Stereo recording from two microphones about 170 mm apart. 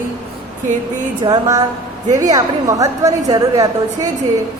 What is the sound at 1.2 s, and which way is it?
A woman's voice, 25° right (ahead or behind).